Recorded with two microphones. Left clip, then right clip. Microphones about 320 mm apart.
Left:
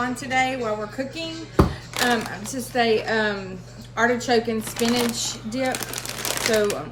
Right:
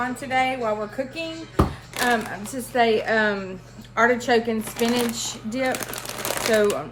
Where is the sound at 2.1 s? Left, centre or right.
Right.